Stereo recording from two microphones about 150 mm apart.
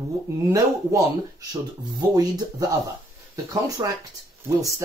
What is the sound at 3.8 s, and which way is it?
Speech, 30° right (ahead or behind).